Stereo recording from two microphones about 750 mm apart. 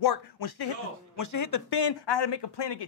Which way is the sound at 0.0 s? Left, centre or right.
Left.